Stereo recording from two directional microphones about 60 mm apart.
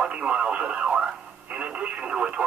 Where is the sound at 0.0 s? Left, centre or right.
Centre.